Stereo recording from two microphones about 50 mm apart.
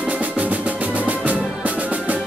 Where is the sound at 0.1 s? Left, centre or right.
Right.